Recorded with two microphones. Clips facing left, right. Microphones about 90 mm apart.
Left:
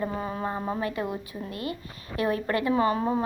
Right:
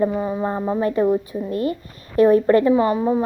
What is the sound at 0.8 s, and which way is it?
Speech, 35° right (ahead or behind).